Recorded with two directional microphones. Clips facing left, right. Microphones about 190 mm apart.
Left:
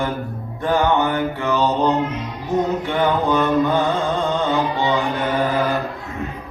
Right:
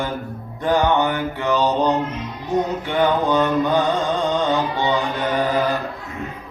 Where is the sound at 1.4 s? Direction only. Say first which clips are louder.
Right 2 dB; 15° right (ahead or behind).